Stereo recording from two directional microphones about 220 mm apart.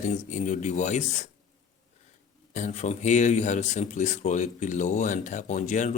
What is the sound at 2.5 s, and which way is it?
A man's voice, 35° left (ahead or behind).